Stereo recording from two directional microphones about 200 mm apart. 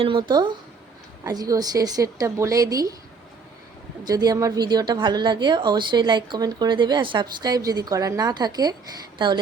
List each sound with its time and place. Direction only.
0.0 s a woman's voice: 25° right (ahead or behind)
4.0 s speech: 20° right (ahead or behind)